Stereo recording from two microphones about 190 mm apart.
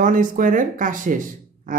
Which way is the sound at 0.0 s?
45° right (ahead or behind).